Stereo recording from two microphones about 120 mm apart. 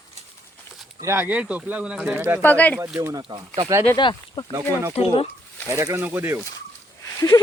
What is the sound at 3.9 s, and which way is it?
Speech, 40° left (ahead or behind).